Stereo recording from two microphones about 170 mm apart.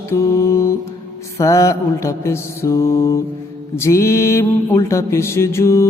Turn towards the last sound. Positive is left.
turn(degrees=15)  # may be behind; listen again after turning